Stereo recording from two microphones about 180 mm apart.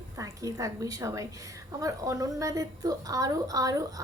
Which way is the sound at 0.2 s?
20° right (ahead or behind).